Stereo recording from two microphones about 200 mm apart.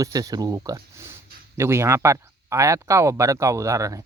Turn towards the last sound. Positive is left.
turn(degrees=-15)  # may be behind; listen again after turning